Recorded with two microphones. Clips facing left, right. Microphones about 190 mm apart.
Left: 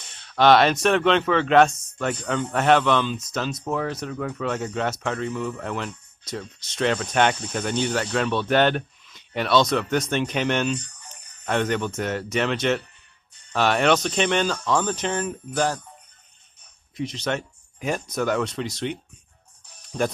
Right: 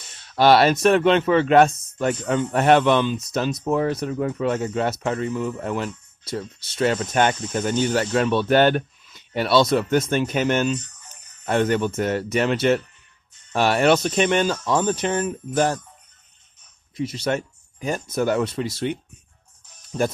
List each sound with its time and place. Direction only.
0.3 s speech: 10° right (ahead or behind)
10.8 s a sound: 10° left (ahead or behind)
11.7 s speech: 5° right (ahead or behind)
16.9 s speech: 5° right (ahead or behind)
19.9 s speech: centre (ahead or behind)